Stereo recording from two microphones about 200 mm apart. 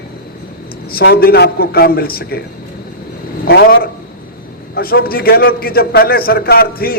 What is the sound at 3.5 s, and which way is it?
A man's voice, 50° left (ahead or behind).